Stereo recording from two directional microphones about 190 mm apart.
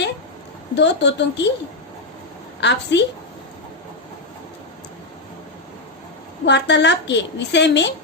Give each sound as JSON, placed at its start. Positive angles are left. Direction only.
{"t": 0.8, "sound": "a woman's voice", "side_deg": 65}
{"t": 2.6, "sound": "a woman's voice", "side_deg": 70}
{"t": 6.4, "sound": "a woman's voice", "side_deg": 70}